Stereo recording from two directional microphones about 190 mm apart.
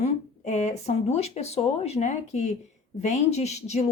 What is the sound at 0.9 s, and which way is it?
A woman's voice, 35° left (ahead or behind).